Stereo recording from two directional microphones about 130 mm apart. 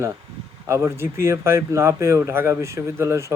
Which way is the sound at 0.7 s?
20° right (ahead or behind).